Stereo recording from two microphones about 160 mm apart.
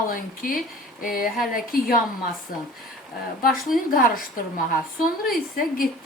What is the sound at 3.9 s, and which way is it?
Speech, 60° left (ahead or behind).